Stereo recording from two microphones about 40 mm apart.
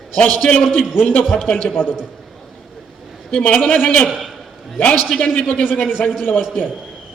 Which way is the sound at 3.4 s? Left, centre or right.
Left.